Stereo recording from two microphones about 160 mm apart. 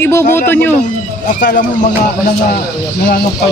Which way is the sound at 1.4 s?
50° left (ahead or behind).